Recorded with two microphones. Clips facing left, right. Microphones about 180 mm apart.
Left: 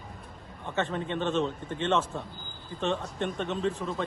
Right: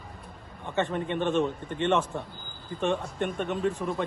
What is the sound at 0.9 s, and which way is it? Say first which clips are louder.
Speech: right 3 dB; 15° right (ahead or behind).